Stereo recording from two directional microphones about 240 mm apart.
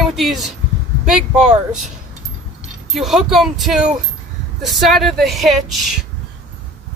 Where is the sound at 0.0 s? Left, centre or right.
Centre.